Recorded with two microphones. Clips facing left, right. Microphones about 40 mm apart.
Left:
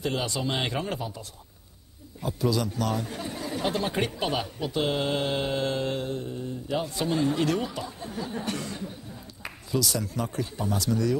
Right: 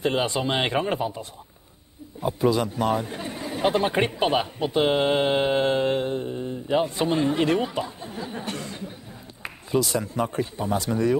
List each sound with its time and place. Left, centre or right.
0.0 s speech: right
9.4 s speech: right